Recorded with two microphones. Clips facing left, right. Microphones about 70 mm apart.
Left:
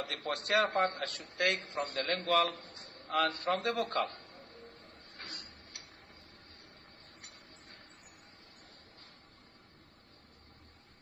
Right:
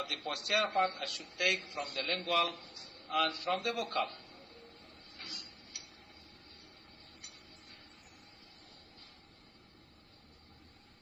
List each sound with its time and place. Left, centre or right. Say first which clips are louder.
0.0 s a man's voice: left 2 dB; left
5.0 s tick-tock: left 2 dB; left
7.2 s a sound: left 1 dB; left